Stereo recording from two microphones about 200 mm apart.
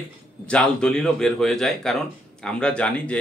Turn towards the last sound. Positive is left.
turn(degrees=5)  # may be behind; listen again after turning